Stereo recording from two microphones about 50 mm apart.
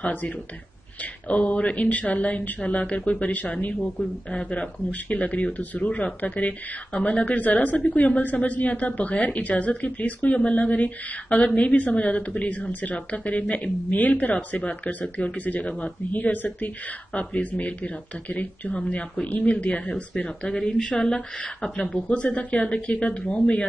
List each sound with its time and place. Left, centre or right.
0.0 s speech: left
1.3 s speech: left